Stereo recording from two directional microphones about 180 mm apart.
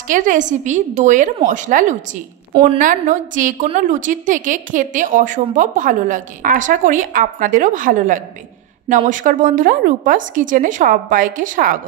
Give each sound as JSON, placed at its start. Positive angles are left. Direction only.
{"t": 0.1, "sound": "a woman's voice", "side_deg": -45}